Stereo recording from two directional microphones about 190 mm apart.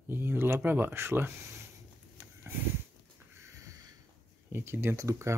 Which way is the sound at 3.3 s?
15° right (ahead or behind).